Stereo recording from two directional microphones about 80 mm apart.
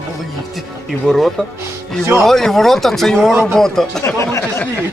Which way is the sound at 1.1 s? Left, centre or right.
Centre.